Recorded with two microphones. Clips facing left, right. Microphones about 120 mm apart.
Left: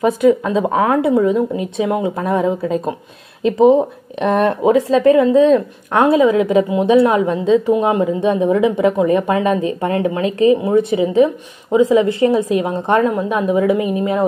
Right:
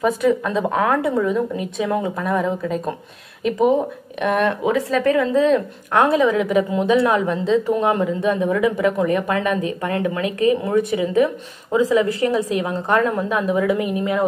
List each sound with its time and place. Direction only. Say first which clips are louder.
0.0 s a woman's voice: left 5 dB; 20° left (ahead or behind)